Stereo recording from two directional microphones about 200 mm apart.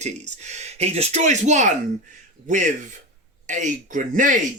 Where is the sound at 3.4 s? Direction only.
40° right (ahead or behind).